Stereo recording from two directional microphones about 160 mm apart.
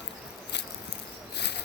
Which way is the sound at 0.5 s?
90° left.